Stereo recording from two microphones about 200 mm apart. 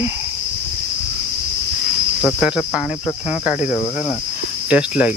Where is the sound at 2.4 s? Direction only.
5° right (ahead or behind).